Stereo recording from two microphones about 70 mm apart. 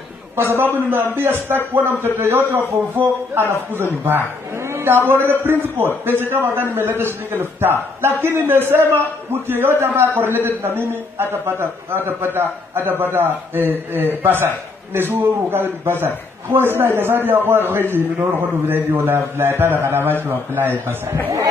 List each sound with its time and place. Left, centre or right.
0.4 s a man's voice: right
0.7 s a man's voice: right
2.0 s a man's voice: right